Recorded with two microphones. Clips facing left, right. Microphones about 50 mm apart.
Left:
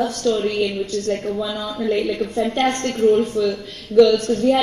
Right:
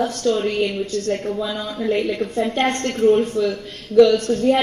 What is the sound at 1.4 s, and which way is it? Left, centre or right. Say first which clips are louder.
Speech: even; centre.